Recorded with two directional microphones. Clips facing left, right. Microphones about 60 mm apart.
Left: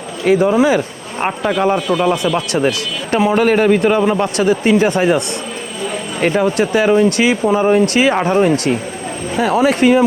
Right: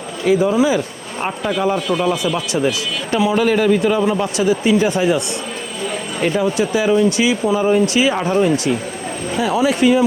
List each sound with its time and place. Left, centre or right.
0.5 s speech: left
1.2 s a man's voice: left
2.2 s speech: left
6.2 s speech: left